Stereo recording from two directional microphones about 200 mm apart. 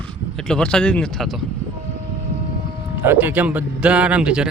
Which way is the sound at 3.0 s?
10° right (ahead or behind).